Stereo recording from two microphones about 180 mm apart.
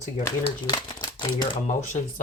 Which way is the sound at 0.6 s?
25° left (ahead or behind).